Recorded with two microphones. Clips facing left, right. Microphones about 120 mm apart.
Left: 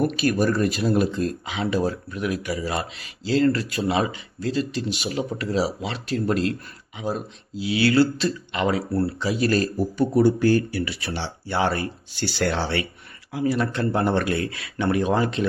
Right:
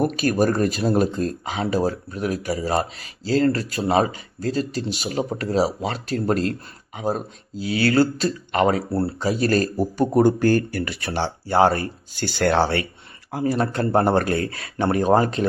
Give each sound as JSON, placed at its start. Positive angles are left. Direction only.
{"t": 0.0, "sound": "speech", "side_deg": -40}
{"t": 8.9, "sound": "speech", "side_deg": -30}
{"t": 9.1, "sound": "speech", "side_deg": -40}